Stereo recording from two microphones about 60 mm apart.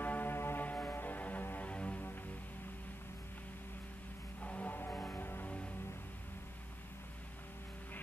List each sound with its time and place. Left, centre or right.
0.0 s music: left
4.4 s music: left